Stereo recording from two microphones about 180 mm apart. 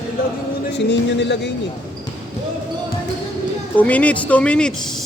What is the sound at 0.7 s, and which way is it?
Speech, 75° left (ahead or behind).